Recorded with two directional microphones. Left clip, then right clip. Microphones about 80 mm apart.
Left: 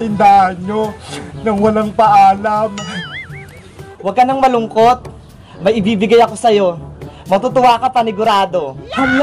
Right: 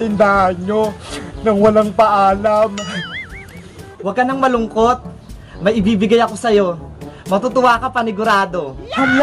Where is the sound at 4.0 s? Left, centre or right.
Right.